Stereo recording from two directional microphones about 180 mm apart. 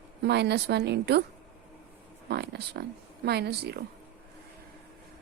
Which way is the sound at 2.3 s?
65° right (ahead or behind).